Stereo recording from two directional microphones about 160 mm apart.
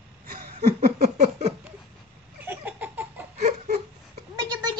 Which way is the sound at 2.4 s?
10° right (ahead or behind).